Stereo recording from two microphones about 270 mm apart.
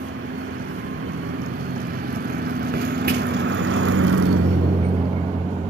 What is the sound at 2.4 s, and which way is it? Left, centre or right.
Vehicle, right.